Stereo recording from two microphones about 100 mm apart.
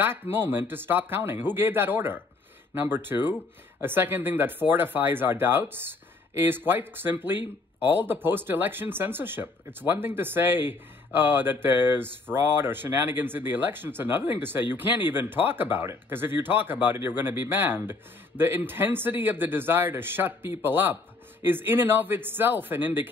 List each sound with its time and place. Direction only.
0.0 s speech: 20° right (ahead or behind)